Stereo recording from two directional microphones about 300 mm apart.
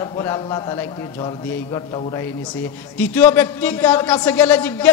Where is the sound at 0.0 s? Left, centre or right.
Centre.